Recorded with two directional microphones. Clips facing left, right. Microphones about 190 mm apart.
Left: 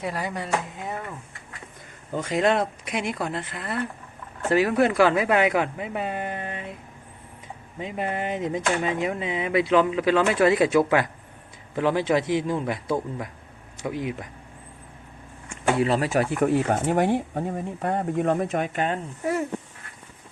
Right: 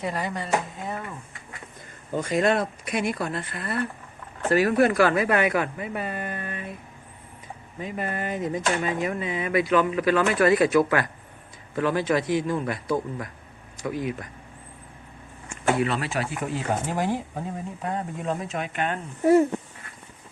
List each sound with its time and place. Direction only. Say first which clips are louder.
0.0 s speech: even; 5° left (ahead or behind)
2.8 s speech: right 1 dB; 15° left (ahead or behind)
7.8 s speech: left 2 dB; 20° left (ahead or behind)
15.8 s speech: left 4 dB; 35° left (ahead or behind)
19.2 s speech: right 9 dB; 30° right (ahead or behind)